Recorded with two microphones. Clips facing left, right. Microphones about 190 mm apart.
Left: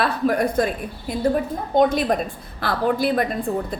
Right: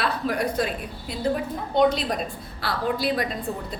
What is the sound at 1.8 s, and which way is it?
A woman's voice, 50° left (ahead or behind).